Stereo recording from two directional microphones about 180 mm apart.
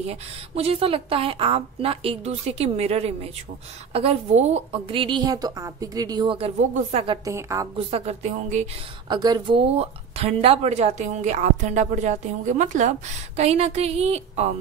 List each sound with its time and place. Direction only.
0.0 s a woman's voice: 35° right (ahead or behind)
7.2 s a woman's voice: 15° right (ahead or behind)
7.7 s speech: 35° right (ahead or behind)
9.1 s speech: 25° right (ahead or behind)